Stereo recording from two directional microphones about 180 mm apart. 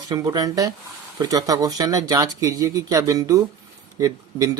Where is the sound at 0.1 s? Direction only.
20° right (ahead or behind).